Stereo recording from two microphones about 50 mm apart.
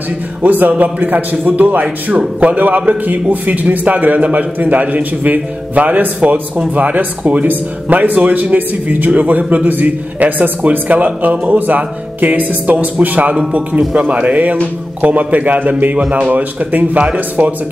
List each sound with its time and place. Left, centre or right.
0.4 s speech: right